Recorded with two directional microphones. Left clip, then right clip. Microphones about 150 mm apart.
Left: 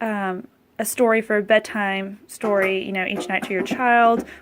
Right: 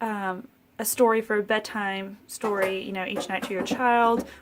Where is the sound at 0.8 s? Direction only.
20° left (ahead or behind).